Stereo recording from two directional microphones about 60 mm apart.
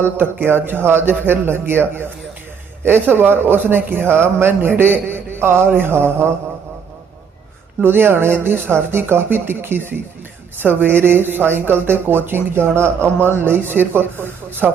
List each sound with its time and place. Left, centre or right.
0.0 s speech: right
7.8 s a man's voice: right